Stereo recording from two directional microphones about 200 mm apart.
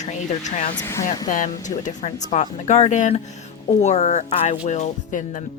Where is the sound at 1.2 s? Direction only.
40° left (ahead or behind).